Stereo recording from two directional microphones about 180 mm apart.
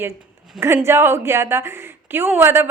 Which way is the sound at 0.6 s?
15° right (ahead or behind).